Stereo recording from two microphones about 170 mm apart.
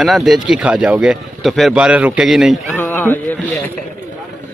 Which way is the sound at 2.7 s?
10° left (ahead or behind).